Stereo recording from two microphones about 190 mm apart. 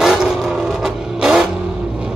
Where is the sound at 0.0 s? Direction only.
Centre (ahead or behind).